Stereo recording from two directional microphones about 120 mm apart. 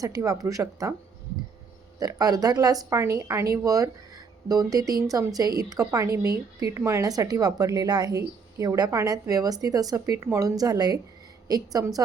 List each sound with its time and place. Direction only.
0.0 s speech: 30° right (ahead or behind)
2.0 s speech: 30° right (ahead or behind)